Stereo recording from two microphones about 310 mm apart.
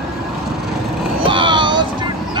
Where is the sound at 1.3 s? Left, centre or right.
Centre.